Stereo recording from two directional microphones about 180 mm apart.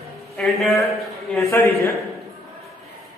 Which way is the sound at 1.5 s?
15° left (ahead or behind).